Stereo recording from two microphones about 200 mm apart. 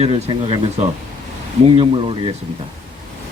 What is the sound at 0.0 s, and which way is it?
Speech, 30° right (ahead or behind).